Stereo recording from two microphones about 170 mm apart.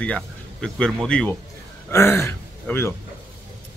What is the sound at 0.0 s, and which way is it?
Speech, 5° left (ahead or behind).